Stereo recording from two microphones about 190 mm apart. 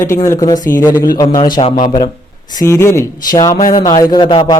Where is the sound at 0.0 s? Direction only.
15° left (ahead or behind).